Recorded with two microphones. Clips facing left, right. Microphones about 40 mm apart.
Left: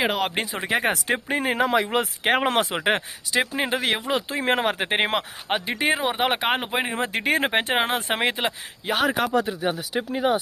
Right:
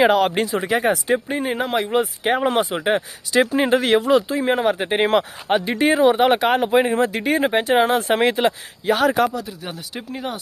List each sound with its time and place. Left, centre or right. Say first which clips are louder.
0.0 s speech: right 8 dB; centre
0.3 s speech: right 6 dB; centre
0.7 s speech: right 3 dB; left
0.9 s speech: right 3 dB; left
3.3 s speech: right 7 dB; centre
4.4 s speech: right 3 dB; left
5.1 s speech: right 7 dB; centre
7.1 s speech: right 3 dB; left
7.7 s speech: right 6 dB; left
7.9 s speech: right 6 dB; centre
9.3 s speech: left 6 dB; left
9.7 s speech: left 5 dB; centre